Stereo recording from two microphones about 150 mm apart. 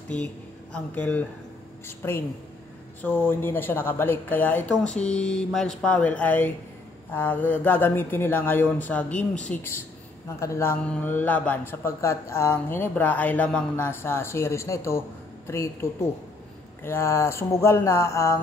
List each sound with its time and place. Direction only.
0.7 s speech: 10° left (ahead or behind)